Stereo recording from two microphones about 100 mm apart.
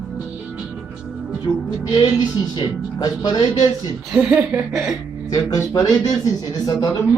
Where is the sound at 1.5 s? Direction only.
40° left (ahead or behind).